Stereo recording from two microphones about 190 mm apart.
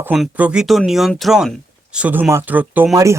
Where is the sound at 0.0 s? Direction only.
5° right (ahead or behind).